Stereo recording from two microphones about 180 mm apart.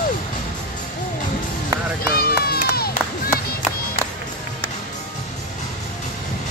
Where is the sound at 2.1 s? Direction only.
60° left (ahead or behind).